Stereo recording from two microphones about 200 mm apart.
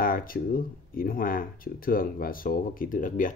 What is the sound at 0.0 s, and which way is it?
Speech, 45° left (ahead or behind).